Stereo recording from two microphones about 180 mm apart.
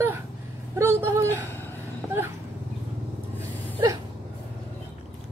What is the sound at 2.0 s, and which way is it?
Dog, 5° left (ahead or behind).